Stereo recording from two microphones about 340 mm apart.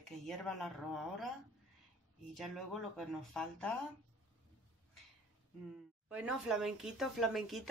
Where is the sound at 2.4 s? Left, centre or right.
Centre.